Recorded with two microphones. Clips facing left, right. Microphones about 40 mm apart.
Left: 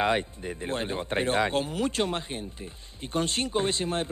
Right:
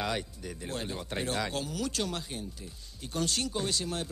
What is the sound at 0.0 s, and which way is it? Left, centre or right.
Speech, left.